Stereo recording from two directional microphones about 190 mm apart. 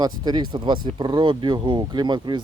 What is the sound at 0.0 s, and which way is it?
Speech, 20° right (ahead or behind).